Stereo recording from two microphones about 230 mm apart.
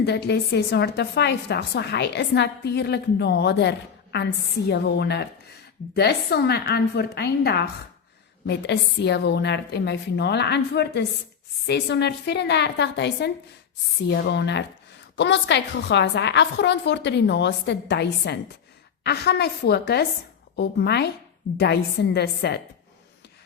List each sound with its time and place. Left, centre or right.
0.0 s a woman's voice: left